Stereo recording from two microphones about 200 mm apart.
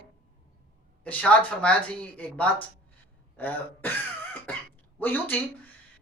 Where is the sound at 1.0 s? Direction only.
5° left (ahead or behind).